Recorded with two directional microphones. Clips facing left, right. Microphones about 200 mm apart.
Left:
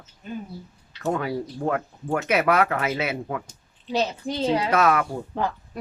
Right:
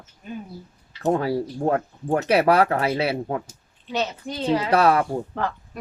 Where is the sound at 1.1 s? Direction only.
35° right (ahead or behind).